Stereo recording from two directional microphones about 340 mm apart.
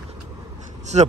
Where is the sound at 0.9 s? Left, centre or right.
Centre.